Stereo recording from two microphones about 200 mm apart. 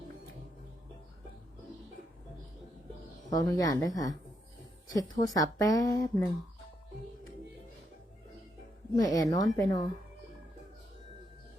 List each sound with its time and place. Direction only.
3.2 s speech: 20° left (ahead or behind)
9.0 s speech: 20° left (ahead or behind)